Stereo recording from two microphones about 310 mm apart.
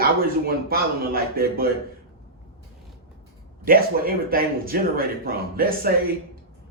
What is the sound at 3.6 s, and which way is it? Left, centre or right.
Speech, right.